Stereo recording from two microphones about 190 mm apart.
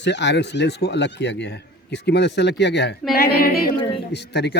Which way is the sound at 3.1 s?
50° left (ahead or behind).